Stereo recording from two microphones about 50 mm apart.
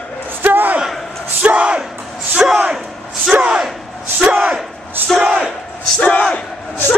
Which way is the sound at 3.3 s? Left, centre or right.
Right.